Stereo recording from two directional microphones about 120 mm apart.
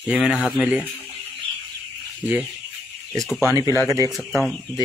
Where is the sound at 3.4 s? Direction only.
25° right (ahead or behind).